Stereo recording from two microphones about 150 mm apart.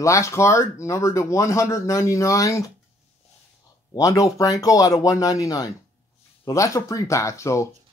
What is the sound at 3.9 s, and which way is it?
Speech, 25° left (ahead or behind).